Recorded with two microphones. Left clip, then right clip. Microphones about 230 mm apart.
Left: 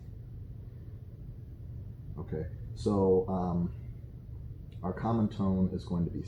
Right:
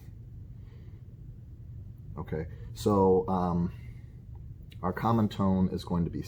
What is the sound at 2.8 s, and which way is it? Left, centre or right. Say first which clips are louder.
Speech: right 3 dB; right.